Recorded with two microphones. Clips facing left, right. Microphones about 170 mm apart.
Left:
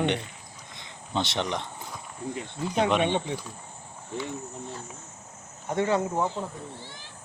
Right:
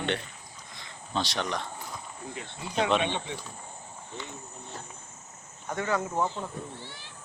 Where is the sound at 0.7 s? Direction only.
20° left (ahead or behind).